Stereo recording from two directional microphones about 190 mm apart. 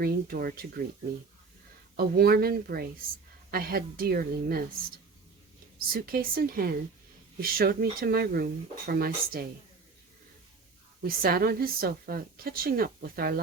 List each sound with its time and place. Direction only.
0.0 s a woman's voice: 50° right (ahead or behind)
2.0 s a woman's voice: 55° right (ahead or behind)
11.0 s a woman's voice: 50° right (ahead or behind)